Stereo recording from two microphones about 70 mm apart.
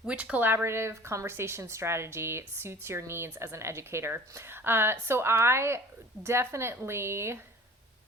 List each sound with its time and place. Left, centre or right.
0.0 s speech: centre
0.5 s a woman's voice: right